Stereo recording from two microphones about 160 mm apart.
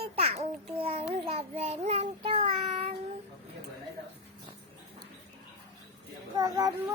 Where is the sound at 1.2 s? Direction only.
40° right (ahead or behind).